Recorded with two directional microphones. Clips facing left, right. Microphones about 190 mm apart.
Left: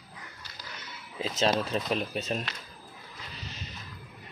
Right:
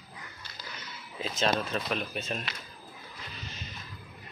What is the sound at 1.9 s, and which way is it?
Speech, 35° left (ahead or behind).